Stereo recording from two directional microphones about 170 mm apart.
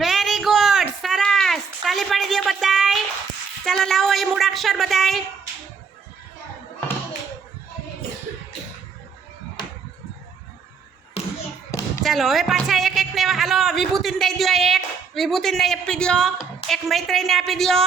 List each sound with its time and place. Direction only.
0.0 s a sound: centre (ahead or behind)
3.6 s a woman's voice: 5° left (ahead or behind)
11.2 s thump: 35° left (ahead or behind)
12.0 s a woman's voice: centre (ahead or behind)